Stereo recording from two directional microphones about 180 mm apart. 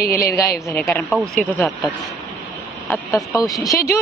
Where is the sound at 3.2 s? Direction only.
Centre (ahead or behind).